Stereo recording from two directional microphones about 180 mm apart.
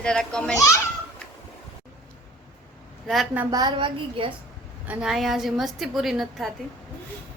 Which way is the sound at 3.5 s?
25° right (ahead or behind).